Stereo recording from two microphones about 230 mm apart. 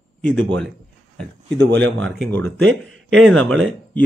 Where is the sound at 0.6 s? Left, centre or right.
Centre.